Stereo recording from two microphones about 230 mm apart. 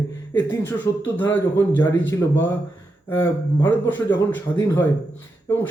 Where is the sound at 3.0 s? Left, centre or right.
Centre.